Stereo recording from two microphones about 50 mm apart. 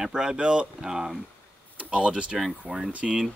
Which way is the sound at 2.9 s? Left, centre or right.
Right.